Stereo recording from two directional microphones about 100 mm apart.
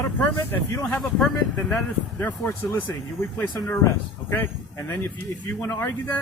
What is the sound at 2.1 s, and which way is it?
Speech, 20° left (ahead or behind).